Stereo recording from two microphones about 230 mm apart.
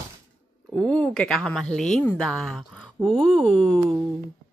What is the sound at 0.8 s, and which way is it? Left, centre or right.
A woman's voice, centre.